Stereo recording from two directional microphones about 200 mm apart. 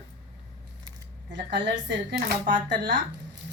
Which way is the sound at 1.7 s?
55° right (ahead or behind).